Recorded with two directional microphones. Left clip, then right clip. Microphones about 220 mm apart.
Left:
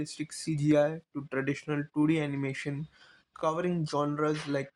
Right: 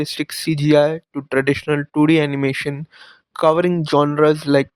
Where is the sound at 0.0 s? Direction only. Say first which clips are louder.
Right 14 dB; 45° right (ahead or behind).